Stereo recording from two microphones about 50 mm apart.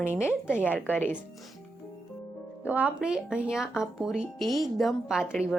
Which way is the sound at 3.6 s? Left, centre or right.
Centre.